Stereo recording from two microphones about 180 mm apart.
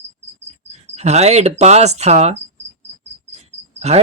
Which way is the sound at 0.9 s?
35° right (ahead or behind).